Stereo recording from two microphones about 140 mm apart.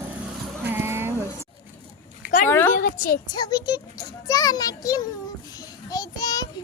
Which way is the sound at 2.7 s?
80° left.